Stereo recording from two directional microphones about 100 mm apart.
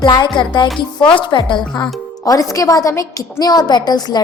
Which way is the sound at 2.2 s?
35° left (ahead or behind).